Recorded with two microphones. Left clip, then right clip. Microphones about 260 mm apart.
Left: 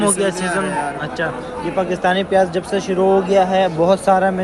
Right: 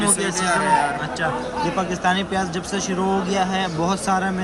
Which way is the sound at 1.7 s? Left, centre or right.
Centre.